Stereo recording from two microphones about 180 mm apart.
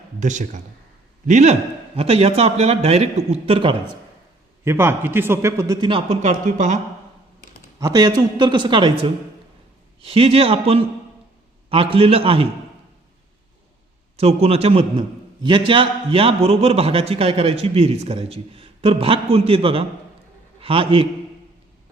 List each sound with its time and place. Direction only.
0.2 s a man's voice: 40° right (ahead or behind)
4.6 s a man's voice: 15° right (ahead or behind); by 6.7 s 45° right (ahead or behind)
7.8 s a man's voice: 20° right (ahead or behind)
14.2 s a man's voice: 35° right (ahead or behind)